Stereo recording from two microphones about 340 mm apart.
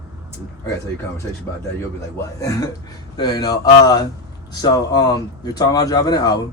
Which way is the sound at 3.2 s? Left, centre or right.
Centre.